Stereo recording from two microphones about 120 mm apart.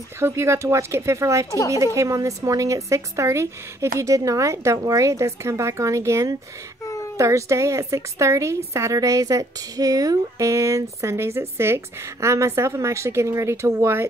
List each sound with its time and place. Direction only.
0.2 s a woman's voice: 25° right (ahead or behind)